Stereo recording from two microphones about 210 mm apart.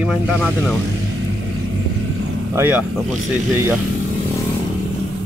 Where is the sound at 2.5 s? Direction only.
10° right (ahead or behind).